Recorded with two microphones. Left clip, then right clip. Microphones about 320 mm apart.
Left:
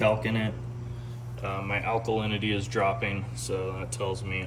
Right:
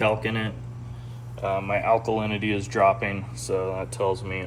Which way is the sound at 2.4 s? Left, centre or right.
Centre.